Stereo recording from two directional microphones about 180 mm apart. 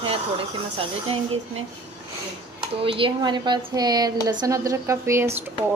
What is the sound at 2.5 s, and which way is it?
A woman's voice, 30° right (ahead or behind).